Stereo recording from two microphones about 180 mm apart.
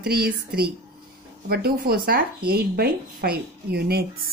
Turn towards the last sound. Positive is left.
turn(degrees=-60)  # may be behind; listen again after turning